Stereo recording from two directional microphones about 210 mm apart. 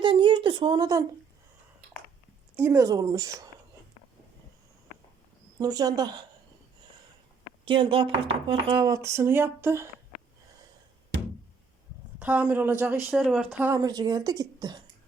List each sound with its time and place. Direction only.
0.0 s a sound: 25° right (ahead or behind)
2.6 s speech: 10° right (ahead or behind)
5.5 s speech: 20° right (ahead or behind)
7.6 s speech: 25° right (ahead or behind)
12.2 s speech: 5° right (ahead or behind)